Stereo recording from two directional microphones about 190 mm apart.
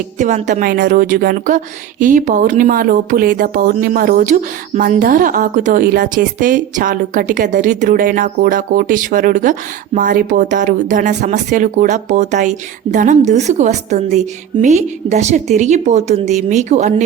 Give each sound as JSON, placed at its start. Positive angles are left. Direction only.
{"t": 0.2, "sound": "a woman's voice", "side_deg": -40}